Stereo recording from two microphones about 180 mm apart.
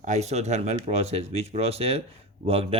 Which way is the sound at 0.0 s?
40° right (ahead or behind).